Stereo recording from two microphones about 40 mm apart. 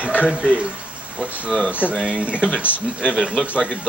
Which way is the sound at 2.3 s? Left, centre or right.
Right.